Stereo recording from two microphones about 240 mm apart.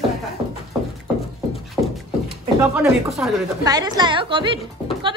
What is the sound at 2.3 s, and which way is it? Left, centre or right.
Speech, centre.